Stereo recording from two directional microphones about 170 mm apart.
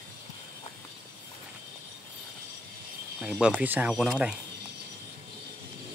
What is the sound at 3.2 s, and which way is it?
Speech, centre (ahead or behind).